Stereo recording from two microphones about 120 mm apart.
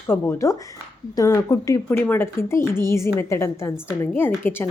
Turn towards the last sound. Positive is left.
turn(degrees=15)  # may be behind; listen again after turning